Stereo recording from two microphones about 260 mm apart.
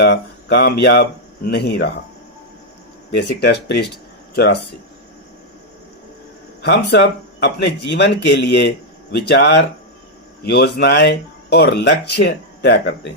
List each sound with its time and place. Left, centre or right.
0.0 s speech: left
3.2 s speech: left
6.6 s speech: left